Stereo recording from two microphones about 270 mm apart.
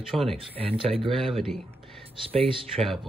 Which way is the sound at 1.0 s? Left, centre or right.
Centre.